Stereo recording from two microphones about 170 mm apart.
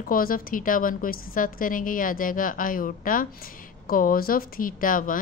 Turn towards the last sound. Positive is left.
turn(degrees=55)  # may be behind; listen again after turning